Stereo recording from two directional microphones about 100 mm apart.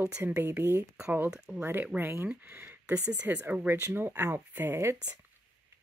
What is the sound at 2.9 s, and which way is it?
Speech, 10° right (ahead or behind).